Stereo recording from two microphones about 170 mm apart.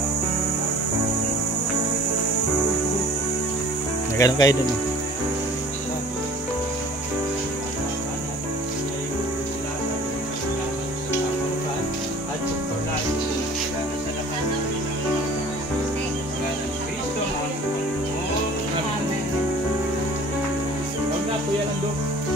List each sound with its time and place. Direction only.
4.2 s speech: 20° left (ahead or behind)